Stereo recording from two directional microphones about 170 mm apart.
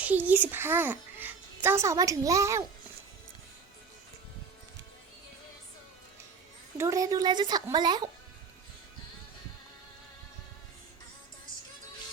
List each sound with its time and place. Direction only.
0.0 s a child's voice: 10° right (ahead or behind)
6.7 s a woman's voice: 20° right (ahead or behind)